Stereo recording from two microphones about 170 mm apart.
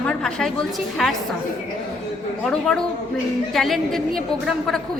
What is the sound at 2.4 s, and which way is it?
A woman's voice, 5° left (ahead or behind).